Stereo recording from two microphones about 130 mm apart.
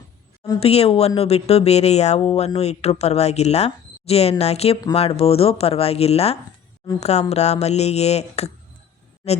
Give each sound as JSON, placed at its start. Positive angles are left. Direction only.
{"t": 0.6, "sound": "speech", "side_deg": 50}